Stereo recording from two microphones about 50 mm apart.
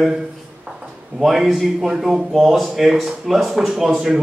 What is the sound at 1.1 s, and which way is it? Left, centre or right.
A man's voice, centre.